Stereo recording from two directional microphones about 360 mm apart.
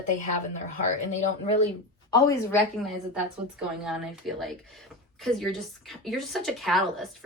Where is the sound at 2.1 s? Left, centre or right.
Centre.